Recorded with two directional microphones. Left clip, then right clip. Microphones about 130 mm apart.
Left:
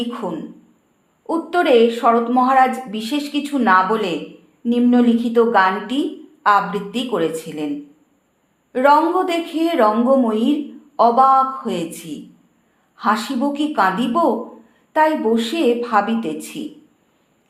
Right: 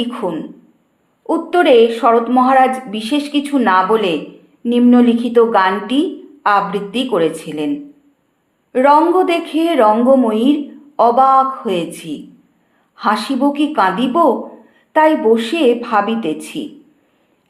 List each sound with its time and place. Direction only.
0.0 s speech: 20° right (ahead or behind)
8.7 s speech: 20° right (ahead or behind)